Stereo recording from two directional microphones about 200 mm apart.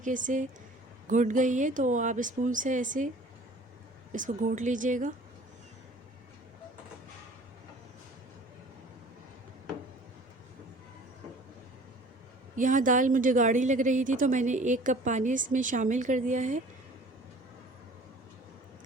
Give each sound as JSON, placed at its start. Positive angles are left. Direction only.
{"t": 0.0, "sound": "a woman's voice", "side_deg": -40}
{"t": 4.1, "sound": "a woman's voice", "side_deg": -40}
{"t": 12.5, "sound": "a woman's voice", "side_deg": -40}